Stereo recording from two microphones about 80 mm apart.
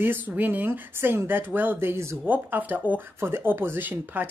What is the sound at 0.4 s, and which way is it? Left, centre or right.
Speech, right.